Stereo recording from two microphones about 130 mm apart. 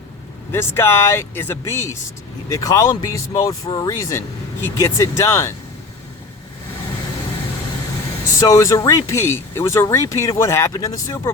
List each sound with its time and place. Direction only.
0.5 s speech: 20° left (ahead or behind)
8.4 s speech: 25° left (ahead or behind)